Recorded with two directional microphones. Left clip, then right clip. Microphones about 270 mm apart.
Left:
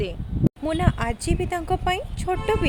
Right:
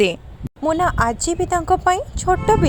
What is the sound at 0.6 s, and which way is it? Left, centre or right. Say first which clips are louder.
Speech: right 10 dB; centre.